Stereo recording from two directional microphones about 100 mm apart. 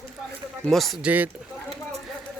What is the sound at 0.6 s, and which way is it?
Speech, centre (ahead or behind).